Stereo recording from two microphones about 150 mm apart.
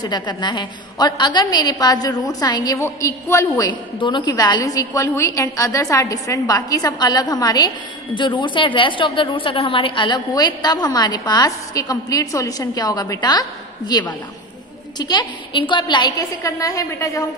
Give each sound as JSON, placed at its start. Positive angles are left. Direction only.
{"t": 0.0, "sound": "a woman's voice", "side_deg": 30}